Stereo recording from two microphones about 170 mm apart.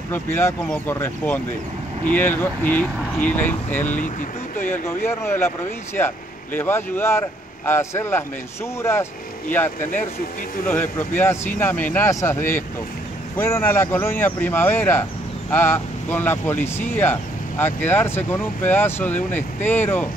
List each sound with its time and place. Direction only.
0.1 s speech: 15° left (ahead or behind)
10.7 s speech: 10° left (ahead or behind)